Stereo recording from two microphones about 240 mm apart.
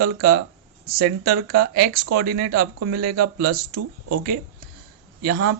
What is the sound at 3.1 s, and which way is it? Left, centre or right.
Speech, right.